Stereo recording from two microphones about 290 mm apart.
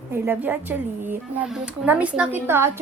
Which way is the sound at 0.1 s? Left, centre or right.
Centre.